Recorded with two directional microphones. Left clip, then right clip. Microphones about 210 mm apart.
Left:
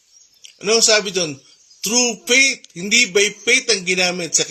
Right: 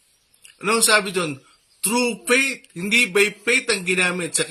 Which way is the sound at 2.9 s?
10° right (ahead or behind).